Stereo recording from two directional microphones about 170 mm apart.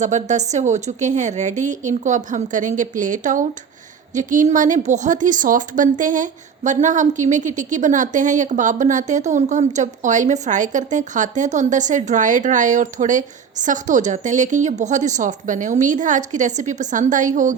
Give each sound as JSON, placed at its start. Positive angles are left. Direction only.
{"t": 0.0, "sound": "a woman's voice", "side_deg": -45}